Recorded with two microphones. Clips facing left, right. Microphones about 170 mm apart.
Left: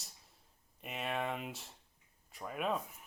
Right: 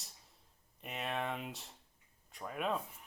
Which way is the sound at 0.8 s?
Centre (ahead or behind).